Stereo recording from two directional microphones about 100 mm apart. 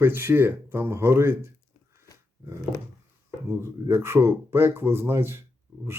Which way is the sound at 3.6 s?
25° right (ahead or behind).